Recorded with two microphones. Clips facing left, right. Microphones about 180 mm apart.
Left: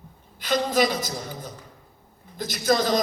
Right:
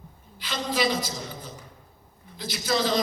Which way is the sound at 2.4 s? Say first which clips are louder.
Left 4 dB; 50° left (ahead or behind).